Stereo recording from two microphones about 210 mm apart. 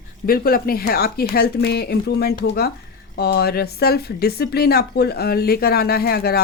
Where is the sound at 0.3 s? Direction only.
45° left (ahead or behind).